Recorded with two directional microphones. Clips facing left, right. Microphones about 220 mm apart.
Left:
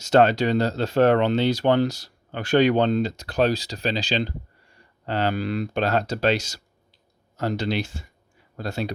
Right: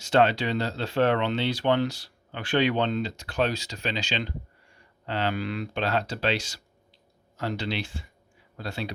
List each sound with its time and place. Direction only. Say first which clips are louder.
0.0 s speech: left 4 dB; 40° left (ahead or behind)